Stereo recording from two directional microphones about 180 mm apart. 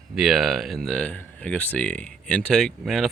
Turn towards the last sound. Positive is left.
turn(degrees=0)  # may be behind; listen again after turning